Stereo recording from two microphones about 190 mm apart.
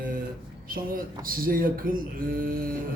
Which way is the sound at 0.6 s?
50° right (ahead or behind).